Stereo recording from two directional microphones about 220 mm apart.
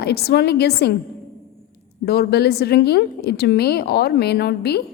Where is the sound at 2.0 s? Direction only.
45° left (ahead or behind).